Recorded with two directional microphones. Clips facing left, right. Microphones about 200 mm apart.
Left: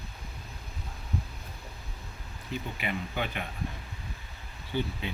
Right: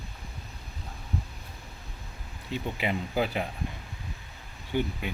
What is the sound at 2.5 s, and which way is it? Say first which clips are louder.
Speech: right 4 dB; 30° right (ahead or behind).